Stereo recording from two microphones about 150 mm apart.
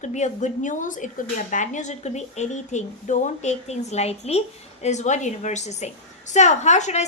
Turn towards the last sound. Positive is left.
turn(degrees=50)  # may be behind; listen again after turning